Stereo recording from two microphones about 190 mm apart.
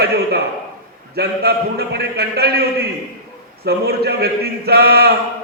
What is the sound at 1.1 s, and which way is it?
A man's voice, 55° right (ahead or behind).